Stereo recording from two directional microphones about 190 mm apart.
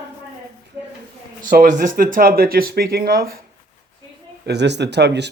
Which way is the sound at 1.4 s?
45° right (ahead or behind).